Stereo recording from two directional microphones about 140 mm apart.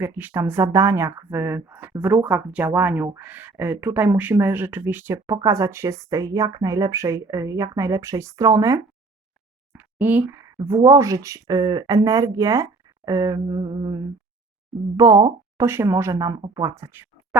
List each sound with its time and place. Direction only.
0.0 s speech: 15° right (ahead or behind)
9.7 s a sound: 10° right (ahead or behind)
10.8 s speech: 20° right (ahead or behind)